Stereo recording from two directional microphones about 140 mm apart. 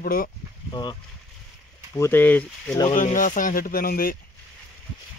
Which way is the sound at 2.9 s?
65° left (ahead or behind).